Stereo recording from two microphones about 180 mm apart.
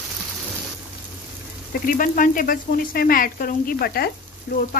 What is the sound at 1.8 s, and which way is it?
Speech, 50° left (ahead or behind).